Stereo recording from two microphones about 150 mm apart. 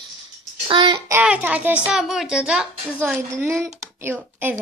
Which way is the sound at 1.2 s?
10° right (ahead or behind).